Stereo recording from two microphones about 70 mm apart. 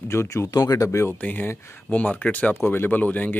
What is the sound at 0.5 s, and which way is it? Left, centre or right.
Speech, left.